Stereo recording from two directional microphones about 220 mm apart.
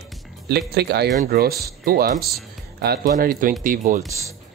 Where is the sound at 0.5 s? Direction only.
50° right (ahead or behind).